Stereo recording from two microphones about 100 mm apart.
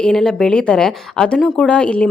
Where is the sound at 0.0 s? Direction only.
5° left (ahead or behind).